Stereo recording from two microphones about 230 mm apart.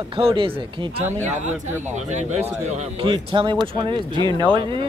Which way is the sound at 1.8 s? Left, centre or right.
Right.